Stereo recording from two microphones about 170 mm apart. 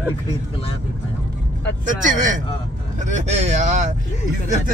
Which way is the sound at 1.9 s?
50° right (ahead or behind).